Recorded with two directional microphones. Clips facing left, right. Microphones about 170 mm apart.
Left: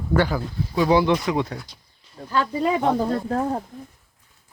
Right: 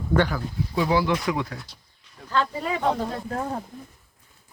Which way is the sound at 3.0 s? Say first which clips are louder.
Left 6 dB; 30° left (ahead or behind).